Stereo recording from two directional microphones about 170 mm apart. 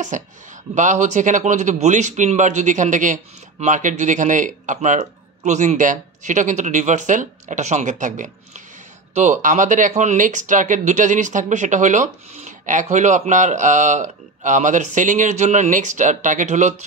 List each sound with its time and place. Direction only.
0.1 s a man's voice: 50° right (ahead or behind)